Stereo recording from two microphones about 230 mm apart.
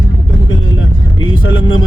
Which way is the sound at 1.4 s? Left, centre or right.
Left.